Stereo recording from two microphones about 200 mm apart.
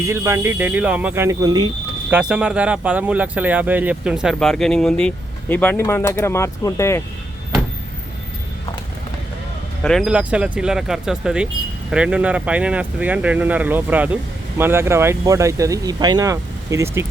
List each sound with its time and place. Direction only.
0.1 s speech: 15° right (ahead or behind)
2.0 s speech: 5° right (ahead or behind); by 7.0 s 15° left (ahead or behind)
9.8 s speech: centre (ahead or behind)